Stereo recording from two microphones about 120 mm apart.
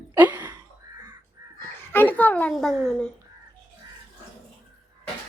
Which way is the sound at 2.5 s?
Centre (ahead or behind).